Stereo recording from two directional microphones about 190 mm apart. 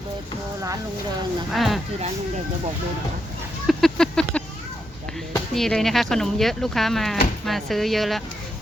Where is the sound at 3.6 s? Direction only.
Centre (ahead or behind).